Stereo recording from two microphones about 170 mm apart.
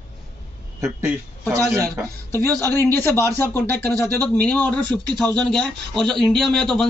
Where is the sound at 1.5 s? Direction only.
20° right (ahead or behind).